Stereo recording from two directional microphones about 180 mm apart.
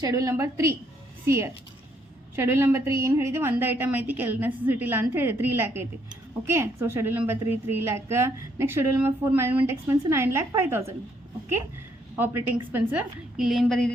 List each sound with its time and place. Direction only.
0.0 s a woman's voice: 20° right (ahead or behind)
12.1 s a woman's voice: 10° right (ahead or behind)